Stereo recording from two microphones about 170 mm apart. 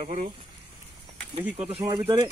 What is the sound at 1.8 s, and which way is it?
Speech, 20° right (ahead or behind).